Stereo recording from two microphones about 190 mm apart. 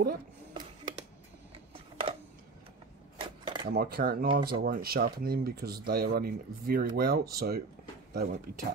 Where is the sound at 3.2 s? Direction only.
25° right (ahead or behind).